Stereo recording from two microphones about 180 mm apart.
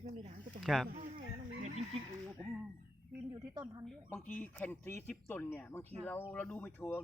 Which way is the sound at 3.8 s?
10° left (ahead or behind).